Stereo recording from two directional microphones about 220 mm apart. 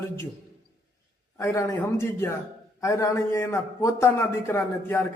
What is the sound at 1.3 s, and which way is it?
A man's voice, 15° left (ahead or behind).